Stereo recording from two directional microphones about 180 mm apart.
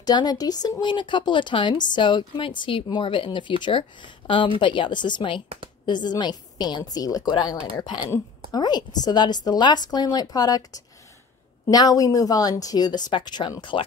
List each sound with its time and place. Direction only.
0.0 s speech: 20° left (ahead or behind)